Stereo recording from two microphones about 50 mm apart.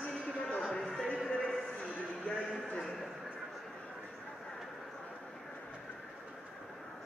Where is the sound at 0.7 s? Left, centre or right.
Centre.